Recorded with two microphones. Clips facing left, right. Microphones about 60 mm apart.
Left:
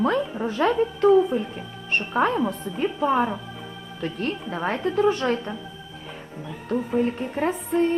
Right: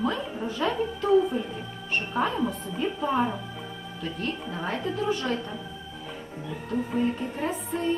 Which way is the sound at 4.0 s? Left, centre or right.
Left.